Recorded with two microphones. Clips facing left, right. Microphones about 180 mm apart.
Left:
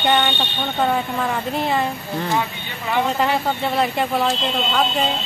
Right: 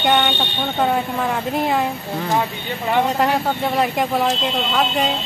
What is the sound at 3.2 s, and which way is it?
Speech, 10° right (ahead or behind).